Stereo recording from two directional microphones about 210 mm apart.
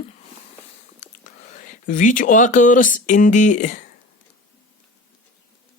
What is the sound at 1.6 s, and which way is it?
Speech, 35° left (ahead or behind).